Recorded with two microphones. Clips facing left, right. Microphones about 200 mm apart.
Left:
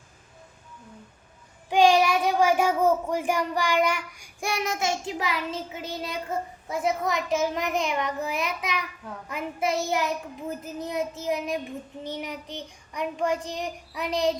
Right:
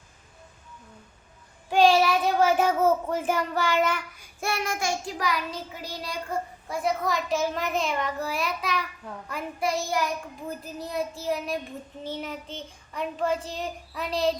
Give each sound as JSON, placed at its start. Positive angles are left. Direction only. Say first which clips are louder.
{"t": 1.7, "sound": "child singing", "louder": "even", "side_deg": 15}
{"t": 9.3, "sound": "speech", "louder": "left 1 dB", "side_deg": 20}
{"t": 12.0, "sound": "child singing", "louder": "right 1 dB", "side_deg": 15}